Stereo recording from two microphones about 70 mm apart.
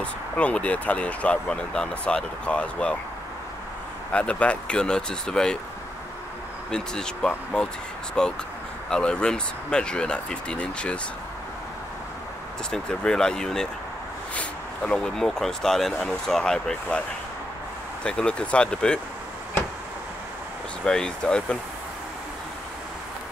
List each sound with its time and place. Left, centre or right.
0.0 s speech: centre
4.1 s speech: centre
6.7 s speech: centre
12.7 s speech: centre
18.0 s speech: centre
20.8 s speech: centre